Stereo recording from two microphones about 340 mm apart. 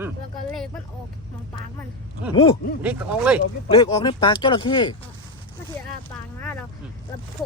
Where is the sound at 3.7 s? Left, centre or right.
Centre.